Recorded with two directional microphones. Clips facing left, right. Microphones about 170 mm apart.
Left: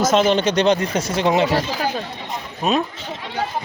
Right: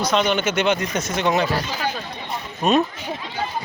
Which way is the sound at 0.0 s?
40° left (ahead or behind).